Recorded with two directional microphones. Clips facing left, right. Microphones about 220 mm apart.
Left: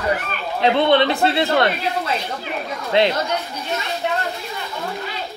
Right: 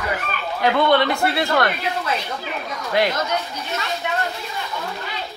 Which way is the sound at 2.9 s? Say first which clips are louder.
Left 3 dB; 25° left (ahead or behind).